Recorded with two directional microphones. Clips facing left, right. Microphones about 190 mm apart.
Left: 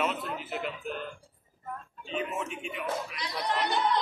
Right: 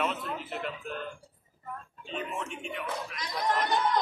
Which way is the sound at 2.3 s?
Centre (ahead or behind).